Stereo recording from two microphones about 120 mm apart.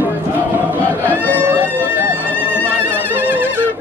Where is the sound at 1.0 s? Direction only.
15° left (ahead or behind).